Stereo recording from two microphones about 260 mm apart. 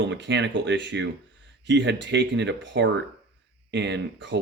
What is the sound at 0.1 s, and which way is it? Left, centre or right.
Speech, right.